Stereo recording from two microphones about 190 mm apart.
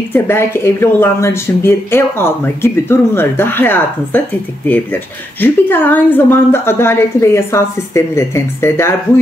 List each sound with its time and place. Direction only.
0.1 s speech: 10° left (ahead or behind)
5.4 s speech: 10° left (ahead or behind)